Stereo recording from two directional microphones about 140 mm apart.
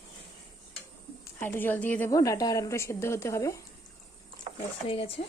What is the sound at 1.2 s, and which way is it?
Speech, 15° left (ahead or behind).